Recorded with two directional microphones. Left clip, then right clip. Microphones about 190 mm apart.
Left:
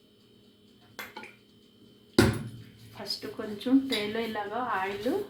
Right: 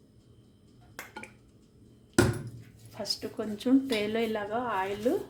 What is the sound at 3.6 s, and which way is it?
Speech, 60° right (ahead or behind).